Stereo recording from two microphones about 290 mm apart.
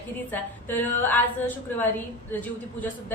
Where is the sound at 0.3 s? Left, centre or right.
Centre.